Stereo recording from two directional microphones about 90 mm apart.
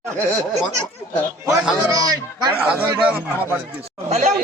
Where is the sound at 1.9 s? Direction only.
40° right (ahead or behind).